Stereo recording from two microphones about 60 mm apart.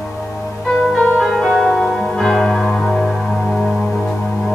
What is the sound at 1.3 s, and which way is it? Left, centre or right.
Music, centre.